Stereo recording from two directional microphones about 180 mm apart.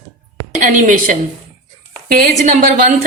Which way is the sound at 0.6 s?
45° right (ahead or behind).